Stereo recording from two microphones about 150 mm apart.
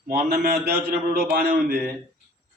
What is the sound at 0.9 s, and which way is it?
Speech, 90° right.